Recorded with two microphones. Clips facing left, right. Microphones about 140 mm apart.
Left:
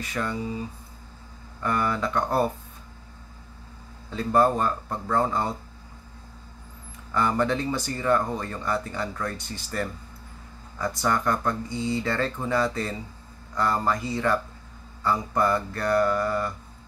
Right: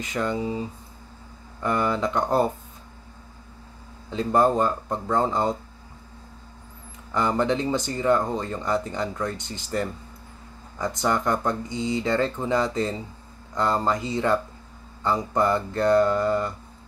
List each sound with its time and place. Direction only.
0.0 s speech: 20° right (ahead or behind)
1.6 s speech: 20° right (ahead or behind)
4.1 s speech: 20° right (ahead or behind)
7.2 s speech: 20° right (ahead or behind)